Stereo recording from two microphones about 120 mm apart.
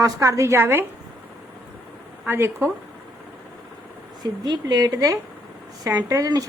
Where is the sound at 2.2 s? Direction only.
20° right (ahead or behind).